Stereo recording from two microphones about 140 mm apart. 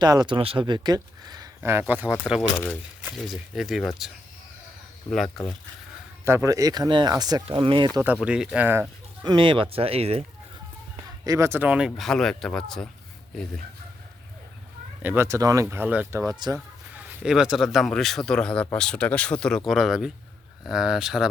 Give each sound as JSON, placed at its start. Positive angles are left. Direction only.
{"t": 0.0, "sound": "speech", "side_deg": -30}
{"t": 1.6, "sound": "speech", "side_deg": -15}
{"t": 6.2, "sound": "speech", "side_deg": -20}
{"t": 7.4, "sound": "speech", "side_deg": -40}
{"t": 8.0, "sound": "speech", "side_deg": -10}
{"t": 9.2, "sound": "speech", "side_deg": -35}
{"t": 11.3, "sound": "speech", "side_deg": -20}
{"t": 11.9, "sound": "speech", "side_deg": 5}
{"t": 15.0, "sound": "speech", "side_deg": -15}
{"t": 16.2, "sound": "speech", "side_deg": -25}
{"t": 16.9, "sound": "speech", "side_deg": -5}